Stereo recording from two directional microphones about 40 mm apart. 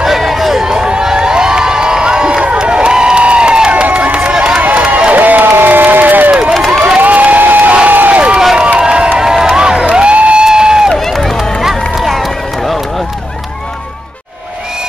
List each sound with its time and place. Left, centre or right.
0.0 s crowd: centre; by 3.8 s right
3.9 s run: right
4.6 s run: right
4.8 s crowd: right
5.1 s a sound: right
6.5 s crowd: centre
7.0 s crowd: right
8.5 s a sound: right
9.2 s crowd: centre
9.9 s music: right
10.4 s crowd: centre
10.9 s crowd: centre
11.9 s run: centre